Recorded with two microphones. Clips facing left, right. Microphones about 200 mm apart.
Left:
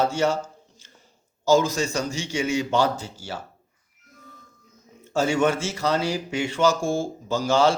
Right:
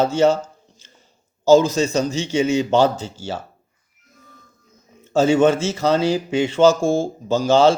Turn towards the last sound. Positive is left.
turn(degrees=-20)  # may be behind; listen again after turning